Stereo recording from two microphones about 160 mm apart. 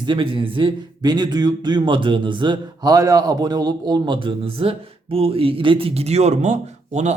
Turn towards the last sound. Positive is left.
turn(degrees=-45)  # may be behind; listen again after turning